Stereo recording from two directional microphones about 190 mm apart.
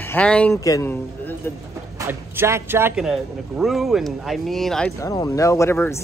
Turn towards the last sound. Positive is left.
turn(degrees=15)  # may be behind; listen again after turning